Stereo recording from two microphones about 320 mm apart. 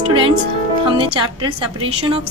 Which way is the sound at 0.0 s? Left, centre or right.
Centre.